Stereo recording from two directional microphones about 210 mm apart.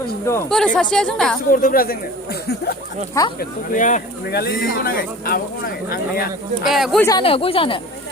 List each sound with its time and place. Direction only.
0.4 s speech: 5° left (ahead or behind)
1.5 s speech: 40° left (ahead or behind)
3.2 s speech: 15° left (ahead or behind)
3.7 s speech: 35° left (ahead or behind)
6.7 s speech: centre (ahead or behind)
7.0 s speech: 20° left (ahead or behind)